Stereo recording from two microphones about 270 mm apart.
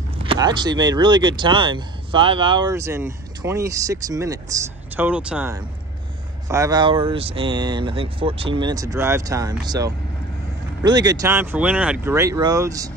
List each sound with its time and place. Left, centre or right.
0.2 s speech: centre